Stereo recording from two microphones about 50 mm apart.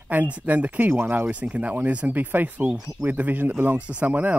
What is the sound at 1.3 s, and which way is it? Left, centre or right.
Speech, right.